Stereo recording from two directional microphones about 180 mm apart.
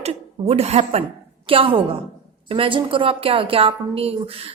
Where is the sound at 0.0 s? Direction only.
35° right (ahead or behind).